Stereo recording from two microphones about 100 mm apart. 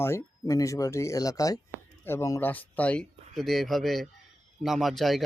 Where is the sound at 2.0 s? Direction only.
20° left (ahead or behind).